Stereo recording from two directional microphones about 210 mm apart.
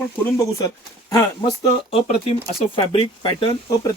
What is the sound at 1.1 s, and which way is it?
Speech, 20° left (ahead or behind).